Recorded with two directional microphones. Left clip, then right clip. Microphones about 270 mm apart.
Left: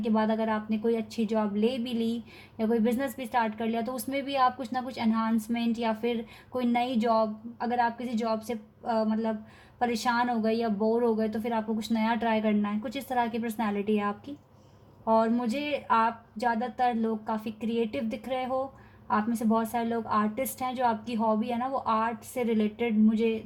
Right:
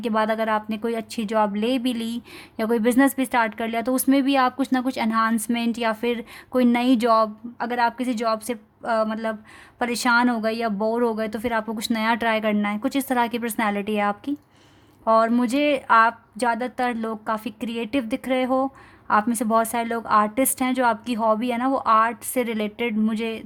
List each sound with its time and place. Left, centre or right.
0.0 s a woman's voice: right